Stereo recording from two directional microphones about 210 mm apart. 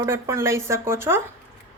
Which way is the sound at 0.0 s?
10° right (ahead or behind).